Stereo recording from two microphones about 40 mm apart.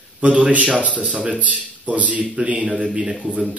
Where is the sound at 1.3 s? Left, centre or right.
Right.